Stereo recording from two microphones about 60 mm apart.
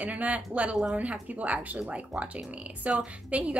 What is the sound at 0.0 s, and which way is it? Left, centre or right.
A woman's voice, right.